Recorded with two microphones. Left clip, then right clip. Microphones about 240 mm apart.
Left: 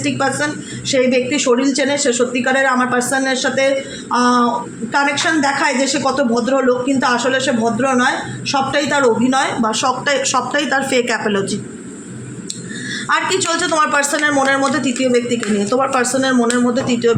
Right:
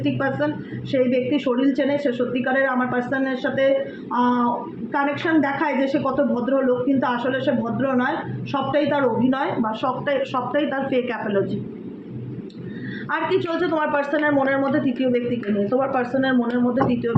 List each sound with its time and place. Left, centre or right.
0.0 s a man's voice: left
13.1 s a man's voice: left